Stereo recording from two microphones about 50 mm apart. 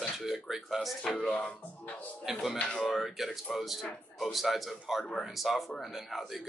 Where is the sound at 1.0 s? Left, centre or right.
Centre.